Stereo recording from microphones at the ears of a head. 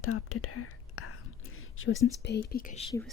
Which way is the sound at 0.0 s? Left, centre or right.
Left.